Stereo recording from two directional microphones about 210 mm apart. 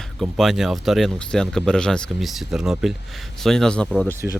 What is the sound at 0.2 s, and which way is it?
Speech, centre (ahead or behind).